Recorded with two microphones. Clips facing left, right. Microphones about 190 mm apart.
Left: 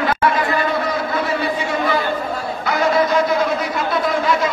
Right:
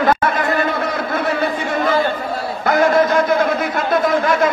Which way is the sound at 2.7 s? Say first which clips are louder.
Right 3 dB; 50° right (ahead or behind).